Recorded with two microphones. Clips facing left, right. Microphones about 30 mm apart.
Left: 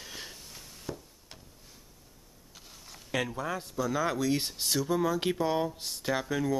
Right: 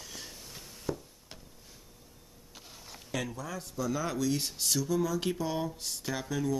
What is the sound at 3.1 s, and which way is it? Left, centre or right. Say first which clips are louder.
Speech: left 5 dB; left.